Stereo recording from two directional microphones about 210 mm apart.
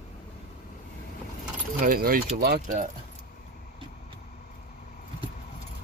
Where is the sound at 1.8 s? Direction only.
45° right (ahead or behind).